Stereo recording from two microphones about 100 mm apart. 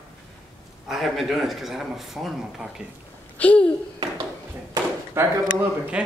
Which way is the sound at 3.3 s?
15° left (ahead or behind).